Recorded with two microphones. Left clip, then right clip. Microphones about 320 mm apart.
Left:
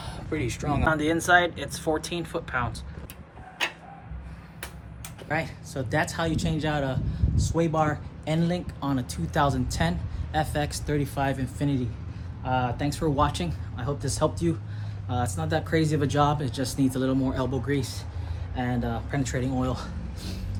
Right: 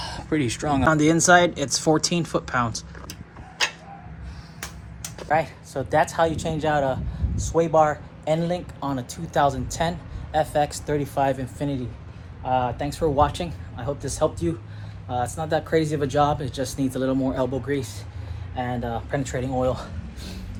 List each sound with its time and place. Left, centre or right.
0.0 s speech: right
5.3 s speech: centre